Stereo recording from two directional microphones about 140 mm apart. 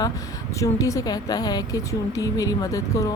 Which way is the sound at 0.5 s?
20° left (ahead or behind).